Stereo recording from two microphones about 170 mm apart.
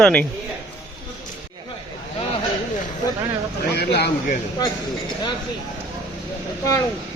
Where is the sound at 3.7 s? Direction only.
70° left (ahead or behind).